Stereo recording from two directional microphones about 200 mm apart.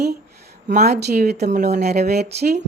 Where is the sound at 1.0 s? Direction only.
55° right (ahead or behind).